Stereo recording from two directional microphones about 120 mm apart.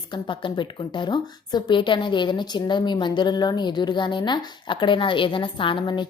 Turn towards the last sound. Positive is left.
turn(degrees=40)  # may be behind; listen again after turning